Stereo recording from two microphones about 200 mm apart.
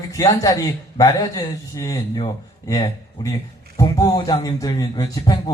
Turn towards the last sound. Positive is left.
turn(degrees=20)  # may be behind; listen again after turning